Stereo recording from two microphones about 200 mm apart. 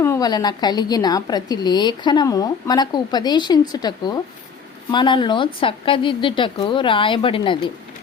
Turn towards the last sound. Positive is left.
turn(degrees=25)  # may be behind; listen again after turning